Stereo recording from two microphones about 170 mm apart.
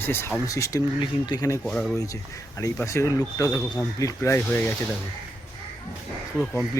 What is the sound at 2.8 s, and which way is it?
Speech, 20° left (ahead or behind).